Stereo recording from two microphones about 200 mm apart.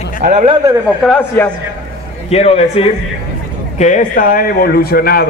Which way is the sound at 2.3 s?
30° left (ahead or behind).